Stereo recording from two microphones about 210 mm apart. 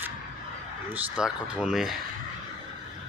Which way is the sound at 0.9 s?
5° right (ahead or behind).